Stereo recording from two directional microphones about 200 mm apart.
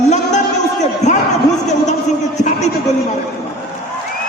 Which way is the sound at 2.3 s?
35° left (ahead or behind).